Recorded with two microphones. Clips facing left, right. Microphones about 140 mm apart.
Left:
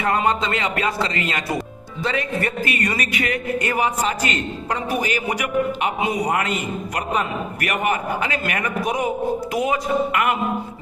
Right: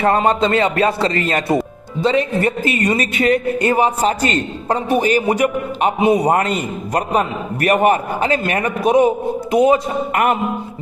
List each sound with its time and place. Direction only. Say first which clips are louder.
0.0 s speech: right 6 dB; 35° right (ahead or behind)
10.1 s speech: right 4 dB; 40° right (ahead or behind)